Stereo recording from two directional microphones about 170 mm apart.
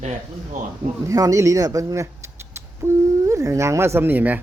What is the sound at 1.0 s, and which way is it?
A man's voice, 20° right (ahead or behind).